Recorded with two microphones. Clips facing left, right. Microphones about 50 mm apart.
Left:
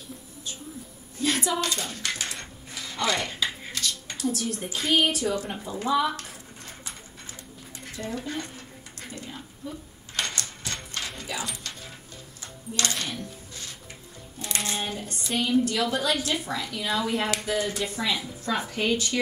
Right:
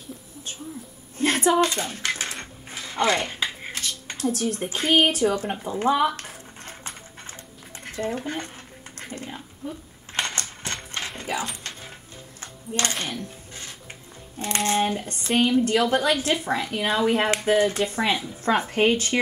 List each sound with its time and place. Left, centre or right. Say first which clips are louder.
1.1 s a sound: right 6 dB; right
2.7 s speech: right 5 dB; right
5.8 s dog: right 3 dB; right
7.8 s speech: right 5 dB; right
9.1 s a sound: right 4 dB; right
12.4 s music: right 3 dB; right
13.1 s a sound: right 2 dB; right
14.4 s a woman's voice: right 8 dB; right
15.5 s a woman's voice: right 4 dB; right